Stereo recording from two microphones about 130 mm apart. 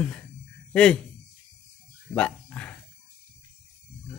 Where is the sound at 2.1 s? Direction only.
10° left (ahead or behind).